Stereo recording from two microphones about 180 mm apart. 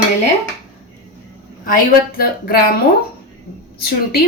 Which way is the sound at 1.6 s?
55° left (ahead or behind).